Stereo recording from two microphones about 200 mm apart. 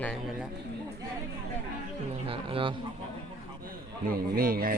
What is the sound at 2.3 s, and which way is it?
Speech, 25° right (ahead or behind).